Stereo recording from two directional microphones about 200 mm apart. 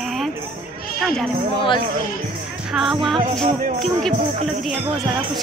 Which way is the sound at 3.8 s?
Centre (ahead or behind).